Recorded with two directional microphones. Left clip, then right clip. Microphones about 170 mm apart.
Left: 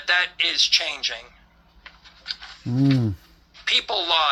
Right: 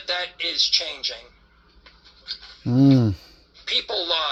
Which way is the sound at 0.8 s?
50° left (ahead or behind).